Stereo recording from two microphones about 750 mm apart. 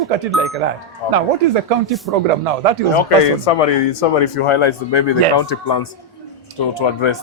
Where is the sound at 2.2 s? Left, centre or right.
Right.